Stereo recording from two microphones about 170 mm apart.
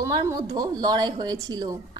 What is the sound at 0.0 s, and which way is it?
A woman's voice, 20° right (ahead or behind).